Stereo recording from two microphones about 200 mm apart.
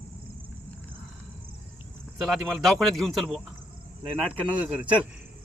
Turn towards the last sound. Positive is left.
turn(degrees=-5)  # may be behind; listen again after turning